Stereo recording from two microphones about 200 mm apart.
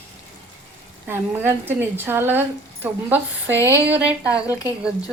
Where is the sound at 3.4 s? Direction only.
15° left (ahead or behind).